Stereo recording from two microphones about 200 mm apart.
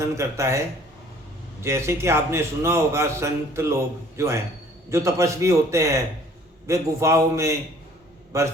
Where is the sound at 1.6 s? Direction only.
15° right (ahead or behind).